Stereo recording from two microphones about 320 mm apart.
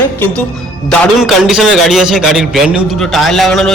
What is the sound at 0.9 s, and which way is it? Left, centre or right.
A man's voice, centre.